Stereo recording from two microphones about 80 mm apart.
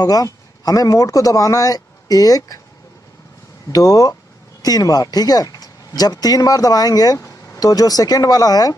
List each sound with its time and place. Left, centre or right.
0.0 s speech: left
3.7 s speech: left